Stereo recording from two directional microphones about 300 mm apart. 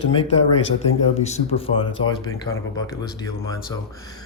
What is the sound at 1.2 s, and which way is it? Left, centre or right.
Speech, centre.